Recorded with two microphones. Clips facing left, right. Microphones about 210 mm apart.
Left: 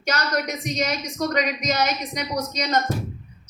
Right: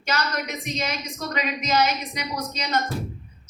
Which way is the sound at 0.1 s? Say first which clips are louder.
Left 3 dB; 50° left (ahead or behind).